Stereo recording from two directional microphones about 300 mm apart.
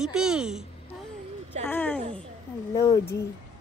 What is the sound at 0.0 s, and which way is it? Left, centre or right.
Speech, centre.